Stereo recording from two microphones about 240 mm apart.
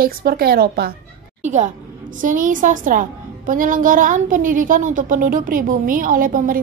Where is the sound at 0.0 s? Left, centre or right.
Right.